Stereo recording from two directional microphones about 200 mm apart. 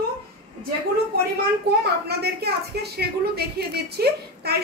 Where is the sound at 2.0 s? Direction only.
55° right (ahead or behind).